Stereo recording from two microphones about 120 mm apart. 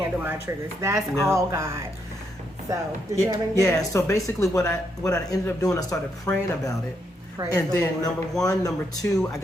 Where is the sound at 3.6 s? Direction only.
30° left (ahead or behind).